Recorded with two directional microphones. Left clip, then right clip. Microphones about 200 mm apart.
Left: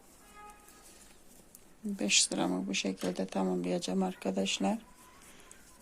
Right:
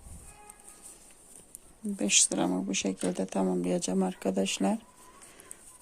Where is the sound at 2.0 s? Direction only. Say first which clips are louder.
Right 2 dB; 25° right (ahead or behind).